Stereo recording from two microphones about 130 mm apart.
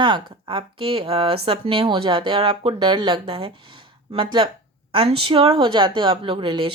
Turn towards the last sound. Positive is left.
turn(degrees=-40)  # may be behind; listen again after turning